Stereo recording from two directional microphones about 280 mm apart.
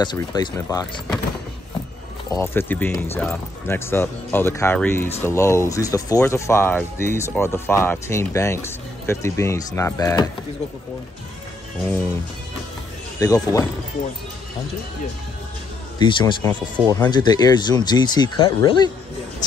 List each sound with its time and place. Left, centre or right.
0.0 s speech: centre
2.3 s speech: centre
13.2 s speech: centre
16.0 s speech: centre